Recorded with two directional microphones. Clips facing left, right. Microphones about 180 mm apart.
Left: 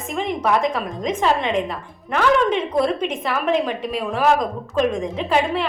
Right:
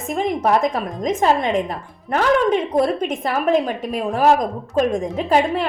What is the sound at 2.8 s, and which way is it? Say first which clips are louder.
A woman's voice: right 1 dB; 45° right (ahead or behind).